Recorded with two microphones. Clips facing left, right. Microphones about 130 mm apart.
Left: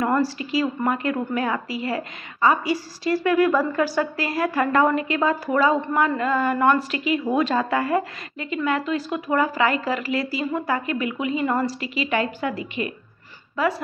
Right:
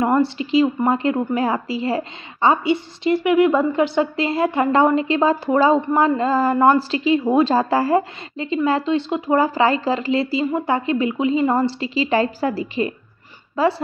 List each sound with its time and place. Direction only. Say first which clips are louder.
0.0 s a woman's voice: right 4 dB; 25° right (ahead or behind)